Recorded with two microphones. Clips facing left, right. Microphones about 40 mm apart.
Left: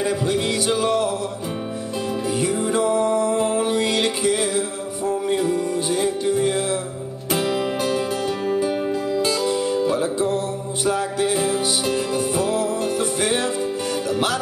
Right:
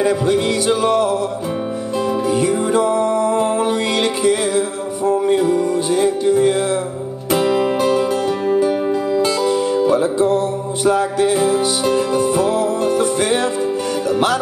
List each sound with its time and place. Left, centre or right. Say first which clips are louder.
0.8 s music: right 5 dB; right
2.2 s music: right 3 dB; centre
5.7 s music: right 5 dB; centre
7.2 s music: right 6 dB; centre
8.5 s music: right 6 dB; centre
9.8 s music: right 6 dB; centre